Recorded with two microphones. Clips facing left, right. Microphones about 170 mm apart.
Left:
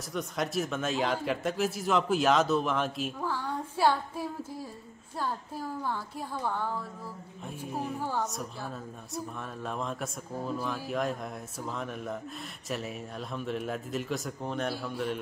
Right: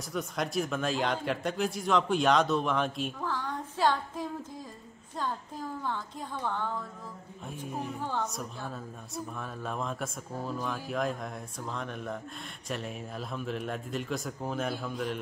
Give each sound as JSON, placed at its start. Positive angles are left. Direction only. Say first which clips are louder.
{"t": 0.1, "sound": "a woman's voice", "louder": "even", "side_deg": 0}